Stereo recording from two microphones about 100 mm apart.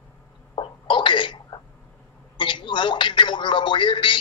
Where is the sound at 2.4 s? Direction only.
50° left (ahead or behind).